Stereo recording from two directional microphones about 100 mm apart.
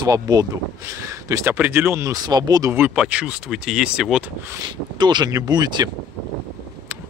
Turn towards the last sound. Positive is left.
turn(degrees=-45)  # may be behind; listen again after turning